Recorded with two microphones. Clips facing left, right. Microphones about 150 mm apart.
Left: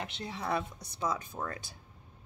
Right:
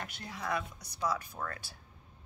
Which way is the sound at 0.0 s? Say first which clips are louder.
Left 3 dB; 25° left (ahead or behind).